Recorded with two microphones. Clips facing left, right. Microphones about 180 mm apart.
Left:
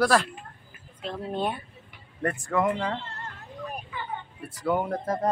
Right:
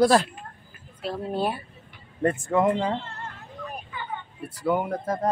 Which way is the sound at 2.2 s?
25° right (ahead or behind).